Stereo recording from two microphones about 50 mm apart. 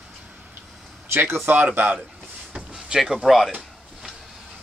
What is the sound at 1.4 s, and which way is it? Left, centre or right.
Speech, right.